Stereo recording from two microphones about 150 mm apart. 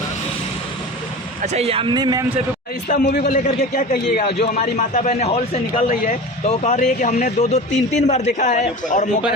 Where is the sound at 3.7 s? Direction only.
75° left (ahead or behind).